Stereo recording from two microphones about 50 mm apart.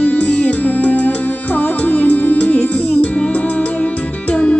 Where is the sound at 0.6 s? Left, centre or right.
Left.